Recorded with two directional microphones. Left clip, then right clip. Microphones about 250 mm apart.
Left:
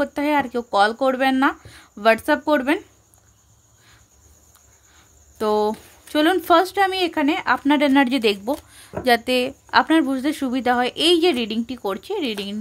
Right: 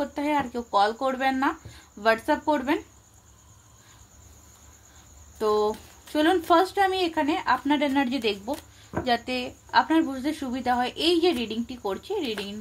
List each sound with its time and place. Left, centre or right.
0.0 s speech: left
5.4 s speech: left